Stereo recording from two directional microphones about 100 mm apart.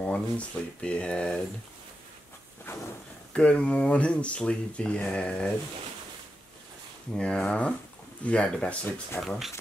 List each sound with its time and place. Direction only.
0.0 s speech: 10° left (ahead or behind)
2.6 s a sound: 20° left (ahead or behind)
3.3 s speech: 10° left (ahead or behind)
7.2 s speech: 10° left (ahead or behind)
9.2 s speech: centre (ahead or behind)